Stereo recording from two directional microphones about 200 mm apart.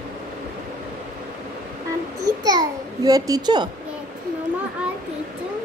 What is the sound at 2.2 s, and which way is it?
A child's voice, 20° right (ahead or behind).